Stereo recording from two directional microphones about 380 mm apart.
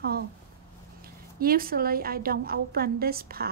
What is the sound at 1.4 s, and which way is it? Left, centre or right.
Speech, right.